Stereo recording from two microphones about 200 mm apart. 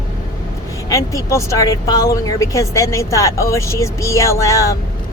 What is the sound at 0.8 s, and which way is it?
A woman's voice, 15° left (ahead or behind).